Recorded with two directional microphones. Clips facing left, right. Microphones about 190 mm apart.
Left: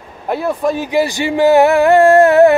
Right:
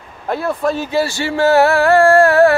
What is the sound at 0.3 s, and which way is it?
Speech, 15° left (ahead or behind).